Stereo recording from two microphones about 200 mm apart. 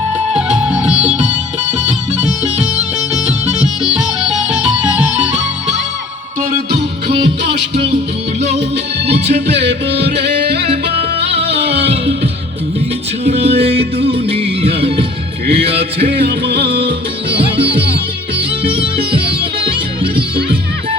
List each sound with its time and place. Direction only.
0.5 s music: 5° right (ahead or behind)
3.8 s music: 5° right (ahead or behind)
7.4 s music: 60° right (ahead or behind)
9.5 s music: 60° right (ahead or behind)
11.2 s music: 30° right (ahead or behind)
13.2 s music: 30° right (ahead or behind)
13.6 s music: 55° right (ahead or behind)
14.0 s music: 30° right (ahead or behind)
18.6 s music: 25° right (ahead or behind)